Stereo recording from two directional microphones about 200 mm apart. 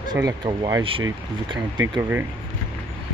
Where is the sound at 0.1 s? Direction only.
20° right (ahead or behind).